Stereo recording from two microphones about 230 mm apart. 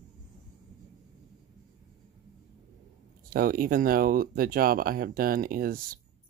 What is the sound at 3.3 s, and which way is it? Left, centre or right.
Speech, right.